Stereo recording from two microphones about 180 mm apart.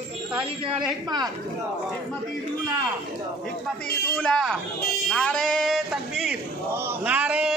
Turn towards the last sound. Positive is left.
turn(degrees=-5)  # may be behind; listen again after turning